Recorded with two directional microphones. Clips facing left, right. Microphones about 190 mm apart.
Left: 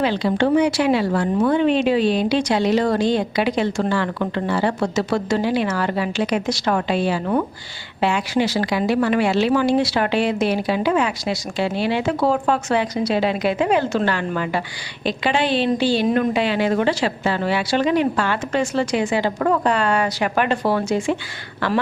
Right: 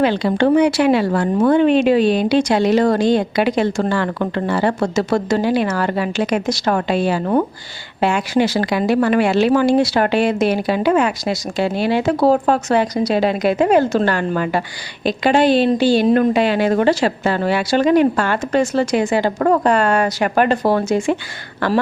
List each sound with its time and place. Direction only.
0.0 s speech: 55° right (ahead or behind)